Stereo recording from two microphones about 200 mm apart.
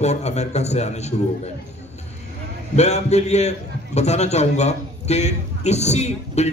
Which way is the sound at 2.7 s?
35° left (ahead or behind).